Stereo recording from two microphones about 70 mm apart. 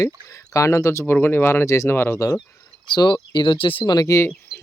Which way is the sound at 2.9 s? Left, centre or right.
Left.